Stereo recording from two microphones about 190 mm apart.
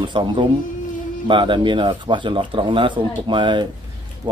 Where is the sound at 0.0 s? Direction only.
25° right (ahead or behind).